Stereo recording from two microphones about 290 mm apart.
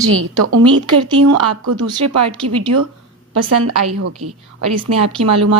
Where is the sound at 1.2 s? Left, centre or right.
Right.